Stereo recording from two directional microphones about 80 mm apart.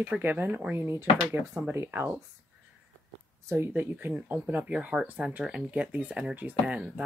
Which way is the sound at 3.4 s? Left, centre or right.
Right.